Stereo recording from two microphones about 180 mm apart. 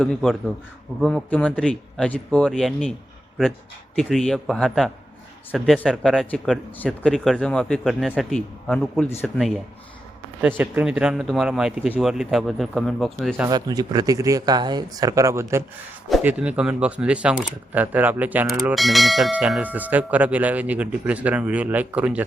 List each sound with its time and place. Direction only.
0.0 s speech: 5° left (ahead or behind)
3.9 s speech: centre (ahead or behind)
10.4 s speech: 10° right (ahead or behind)
13.5 s speech: 20° right (ahead or behind)